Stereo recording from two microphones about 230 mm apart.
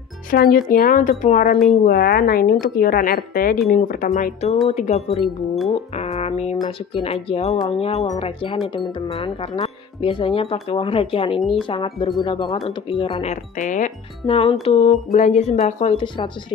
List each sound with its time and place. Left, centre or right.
0.3 s speech: left
5.1 s speech: centre
5.7 s speech: left